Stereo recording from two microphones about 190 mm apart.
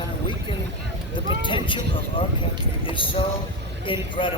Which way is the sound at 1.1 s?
25° left (ahead or behind).